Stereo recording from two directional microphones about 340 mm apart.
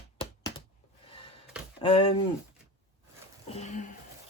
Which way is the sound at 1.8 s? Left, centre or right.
Centre.